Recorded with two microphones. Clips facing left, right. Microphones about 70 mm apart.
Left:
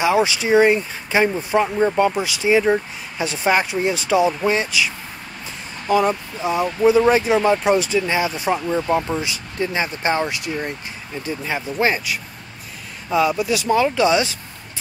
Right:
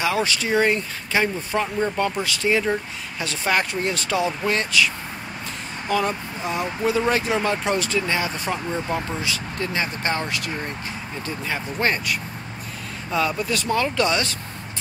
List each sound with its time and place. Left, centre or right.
0.0 s speech: centre